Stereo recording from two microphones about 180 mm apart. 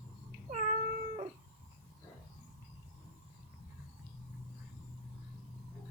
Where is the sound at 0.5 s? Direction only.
40° right (ahead or behind).